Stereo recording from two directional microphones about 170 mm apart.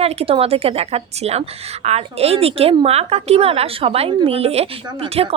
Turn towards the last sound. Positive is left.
turn(degrees=-35)  # may be behind; listen again after turning